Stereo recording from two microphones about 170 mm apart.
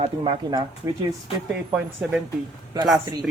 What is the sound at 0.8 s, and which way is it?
Speech, 20° right (ahead or behind).